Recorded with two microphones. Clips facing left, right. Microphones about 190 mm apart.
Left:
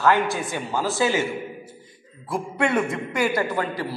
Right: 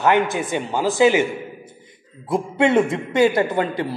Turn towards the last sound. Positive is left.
turn(degrees=-20)  # may be behind; listen again after turning